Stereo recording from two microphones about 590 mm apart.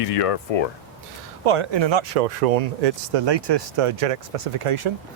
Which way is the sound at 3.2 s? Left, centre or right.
Right.